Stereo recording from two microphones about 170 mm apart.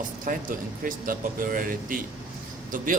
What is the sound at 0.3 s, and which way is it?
A man's voice, 55° right (ahead or behind).